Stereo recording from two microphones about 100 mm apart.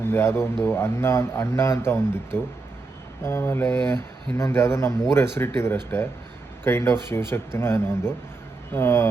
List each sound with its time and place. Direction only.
0.0 s speech: 25° left (ahead or behind)